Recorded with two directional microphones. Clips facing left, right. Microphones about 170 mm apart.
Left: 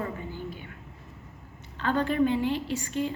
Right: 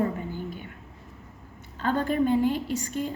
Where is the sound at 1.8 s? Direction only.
45° right (ahead or behind).